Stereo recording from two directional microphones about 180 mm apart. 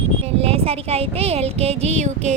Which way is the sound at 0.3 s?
35° right (ahead or behind).